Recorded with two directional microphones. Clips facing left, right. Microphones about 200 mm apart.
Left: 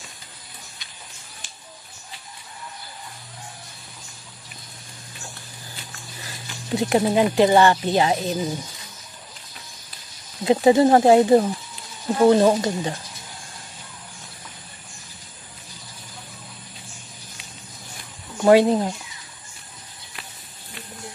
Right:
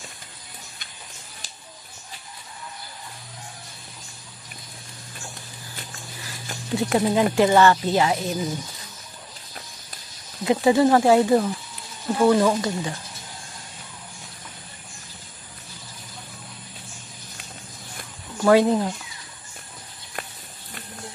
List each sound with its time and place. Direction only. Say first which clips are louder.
6.8 s speech: left 2 dB; 20° left (ahead or behind)
10.4 s speech: left 2 dB; 25° left (ahead or behind)
18.4 s speech: left 2 dB; 20° left (ahead or behind)